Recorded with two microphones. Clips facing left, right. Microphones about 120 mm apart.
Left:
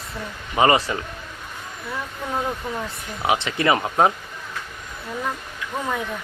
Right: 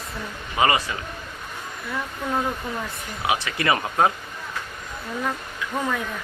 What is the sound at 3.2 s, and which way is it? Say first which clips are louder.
Speech: left 3 dB; 25° left (ahead or behind).